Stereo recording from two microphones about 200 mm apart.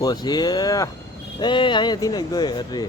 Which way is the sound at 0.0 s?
20° left (ahead or behind).